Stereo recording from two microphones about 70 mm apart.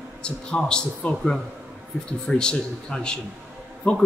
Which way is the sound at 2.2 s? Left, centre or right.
Centre.